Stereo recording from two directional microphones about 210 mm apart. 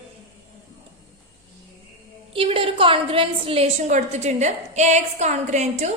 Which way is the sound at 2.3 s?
25° right (ahead or behind).